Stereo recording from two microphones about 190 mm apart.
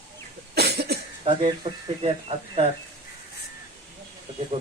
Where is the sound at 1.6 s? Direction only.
25° right (ahead or behind).